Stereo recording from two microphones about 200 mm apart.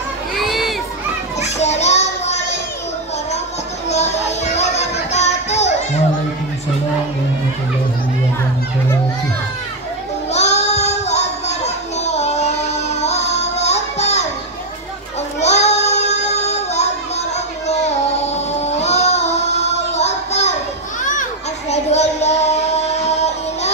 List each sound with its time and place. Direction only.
0.4 s a sound: centre (ahead or behind)
1.4 s children playing: 35° left (ahead or behind)
3.9 s music: 35° left (ahead or behind)
10.3 s child singing: 35° left (ahead or behind)
15.4 s child singing: 35° left (ahead or behind)
17.6 s a sound: 35° left (ahead or behind)
21.0 s children playing: 40° left (ahead or behind)